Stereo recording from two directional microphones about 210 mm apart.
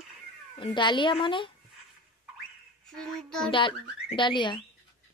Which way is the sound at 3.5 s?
25° left (ahead or behind).